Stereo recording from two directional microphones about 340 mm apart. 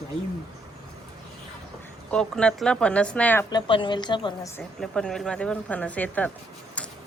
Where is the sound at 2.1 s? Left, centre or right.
Centre.